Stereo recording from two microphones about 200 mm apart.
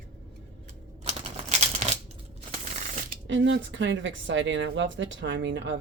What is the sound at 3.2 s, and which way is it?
Speech, 65° right (ahead or behind).